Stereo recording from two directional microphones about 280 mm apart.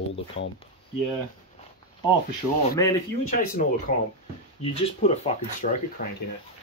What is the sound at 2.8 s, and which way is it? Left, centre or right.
Speech, centre.